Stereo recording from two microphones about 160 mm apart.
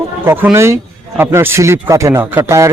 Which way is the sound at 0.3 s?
15° right (ahead or behind).